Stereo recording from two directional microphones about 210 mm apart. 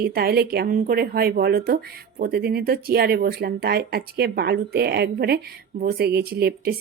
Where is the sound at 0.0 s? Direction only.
45° right (ahead or behind).